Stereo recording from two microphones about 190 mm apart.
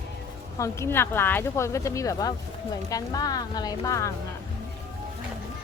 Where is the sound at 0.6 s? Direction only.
15° left (ahead or behind).